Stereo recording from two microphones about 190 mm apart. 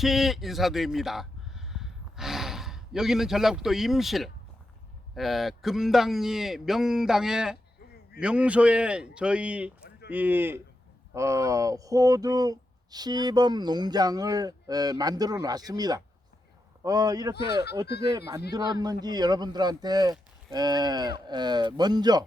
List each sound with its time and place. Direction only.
0.0 s a man's voice: centre (ahead or behind); by 17.3 s 20° right (ahead or behind)
17.3 s speech: 60° left (ahead or behind)
18.5 s speech: 20° right (ahead or behind)